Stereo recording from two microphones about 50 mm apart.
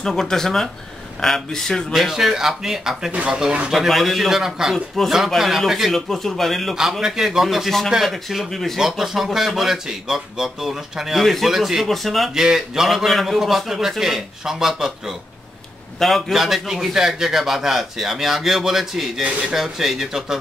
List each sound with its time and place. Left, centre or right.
0.0 s speech: centre
1.9 s speech: centre
3.1 s speech: right
3.7 s a man's voice: centre
4.7 s a man's voice: centre
5.9 s a man's voice: centre
6.7 s a man's voice: centre
8.7 s speech: centre
12.4 s a man's voice: centre